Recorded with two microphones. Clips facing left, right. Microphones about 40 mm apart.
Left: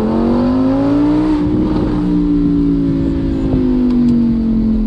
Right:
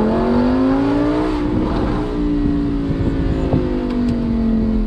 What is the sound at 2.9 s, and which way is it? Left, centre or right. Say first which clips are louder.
Vehicle: left 4 dB; right.